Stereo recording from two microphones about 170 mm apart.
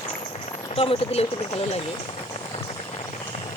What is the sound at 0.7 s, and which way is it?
Speech, 30° left (ahead or behind).